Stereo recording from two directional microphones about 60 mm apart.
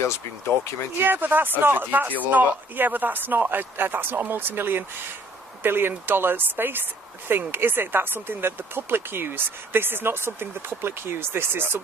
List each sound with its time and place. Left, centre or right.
0.0 s speech: left
1.0 s speech: right